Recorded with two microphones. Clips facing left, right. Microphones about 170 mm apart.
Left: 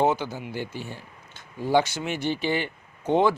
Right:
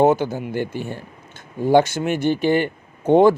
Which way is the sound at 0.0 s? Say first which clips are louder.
Right 7 dB; 50° right (ahead or behind).